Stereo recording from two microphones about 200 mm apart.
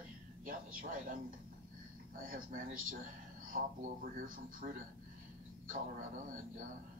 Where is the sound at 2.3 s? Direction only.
45° right (ahead or behind).